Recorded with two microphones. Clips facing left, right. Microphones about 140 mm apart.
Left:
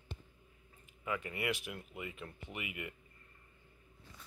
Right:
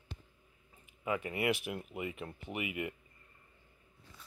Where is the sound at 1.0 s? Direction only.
20° right (ahead or behind).